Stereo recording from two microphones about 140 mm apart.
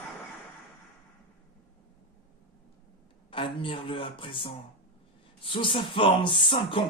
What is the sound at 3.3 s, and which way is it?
Speech, 40° left (ahead or behind).